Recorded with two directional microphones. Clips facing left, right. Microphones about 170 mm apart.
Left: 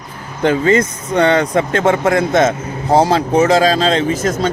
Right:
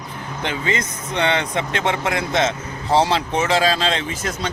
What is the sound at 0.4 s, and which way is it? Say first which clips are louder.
Speech: left 12 dB; 45° left (ahead or behind).